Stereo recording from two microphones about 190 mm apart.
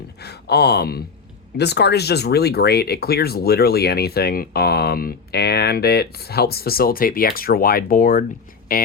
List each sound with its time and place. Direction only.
0.2 s speech: 60° left (ahead or behind)